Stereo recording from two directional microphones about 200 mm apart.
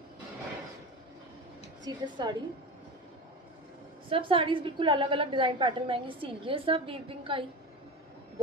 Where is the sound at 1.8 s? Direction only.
20° right (ahead or behind).